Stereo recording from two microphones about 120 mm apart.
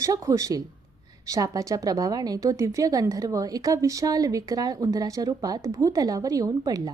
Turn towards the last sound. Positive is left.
turn(degrees=-30)  # may be behind; listen again after turning